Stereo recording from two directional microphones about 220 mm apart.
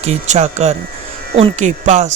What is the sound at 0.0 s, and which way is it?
Speech, 30° right (ahead or behind).